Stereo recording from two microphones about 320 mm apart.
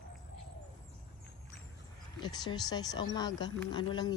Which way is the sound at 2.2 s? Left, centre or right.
Centre.